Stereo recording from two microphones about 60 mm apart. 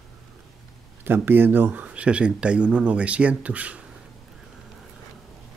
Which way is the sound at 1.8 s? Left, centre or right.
Centre.